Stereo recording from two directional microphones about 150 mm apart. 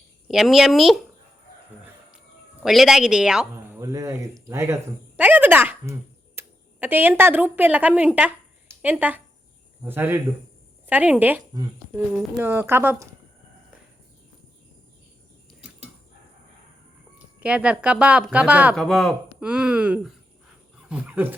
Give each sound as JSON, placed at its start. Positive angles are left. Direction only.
{"t": 0.3, "sound": "speech", "side_deg": 0}
{"t": 2.6, "sound": "speech", "side_deg": 0}
{"t": 3.5, "sound": "speech", "side_deg": -15}
{"t": 17.4, "sound": "speech", "side_deg": -5}
{"t": 18.8, "sound": "speech", "side_deg": 5}